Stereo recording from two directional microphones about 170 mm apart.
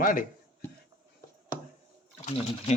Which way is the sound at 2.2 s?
40° left (ahead or behind).